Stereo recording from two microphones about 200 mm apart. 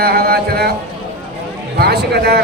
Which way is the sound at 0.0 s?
50° right (ahead or behind).